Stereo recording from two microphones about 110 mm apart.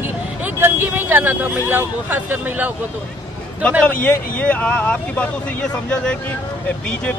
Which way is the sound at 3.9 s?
15° left (ahead or behind).